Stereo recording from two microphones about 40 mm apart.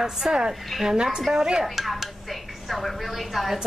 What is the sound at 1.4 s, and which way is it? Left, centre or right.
Speech, centre.